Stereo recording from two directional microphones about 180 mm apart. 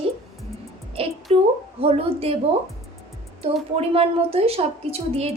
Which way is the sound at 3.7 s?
35° right (ahead or behind).